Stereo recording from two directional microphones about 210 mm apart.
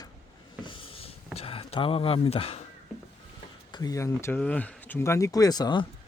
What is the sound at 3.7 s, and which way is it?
Speech, 15° left (ahead or behind).